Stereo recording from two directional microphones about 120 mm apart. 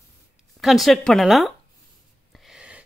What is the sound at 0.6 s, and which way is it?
Speech, centre (ahead or behind).